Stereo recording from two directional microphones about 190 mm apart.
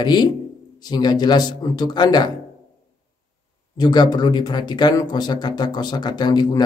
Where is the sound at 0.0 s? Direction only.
25° left (ahead or behind).